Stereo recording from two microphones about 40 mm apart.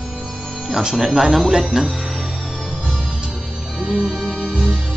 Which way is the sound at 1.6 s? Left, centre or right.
Centre.